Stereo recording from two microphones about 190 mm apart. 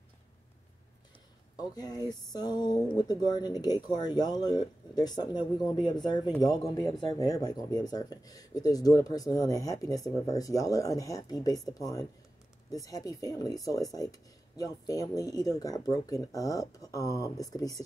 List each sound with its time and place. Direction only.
1.6 s speech: 20° left (ahead or behind)
12.7 s speech: 20° left (ahead or behind)